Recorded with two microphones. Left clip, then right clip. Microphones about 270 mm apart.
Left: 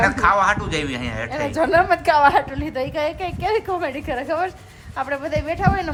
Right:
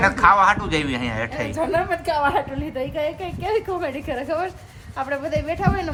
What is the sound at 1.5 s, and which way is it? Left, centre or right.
Speech, left.